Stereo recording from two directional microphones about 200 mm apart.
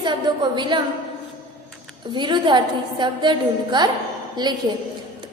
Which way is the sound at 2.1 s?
20° right (ahead or behind).